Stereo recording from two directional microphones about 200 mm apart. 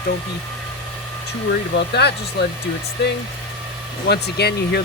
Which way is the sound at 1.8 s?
60° left (ahead or behind).